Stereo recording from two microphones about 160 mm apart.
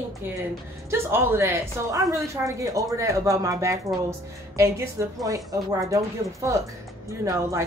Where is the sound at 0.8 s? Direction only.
15° right (ahead or behind).